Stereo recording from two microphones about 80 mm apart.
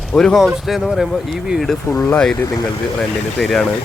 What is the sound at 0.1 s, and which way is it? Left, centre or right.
Speech, centre.